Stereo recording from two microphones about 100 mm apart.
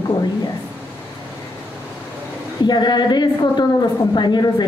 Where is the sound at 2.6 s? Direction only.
45° left (ahead or behind).